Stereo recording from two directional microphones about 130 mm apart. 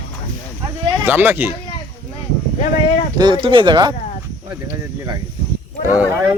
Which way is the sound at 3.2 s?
35° right (ahead or behind).